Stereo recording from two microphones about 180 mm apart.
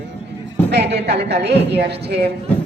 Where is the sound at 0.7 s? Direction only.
70° right (ahead or behind).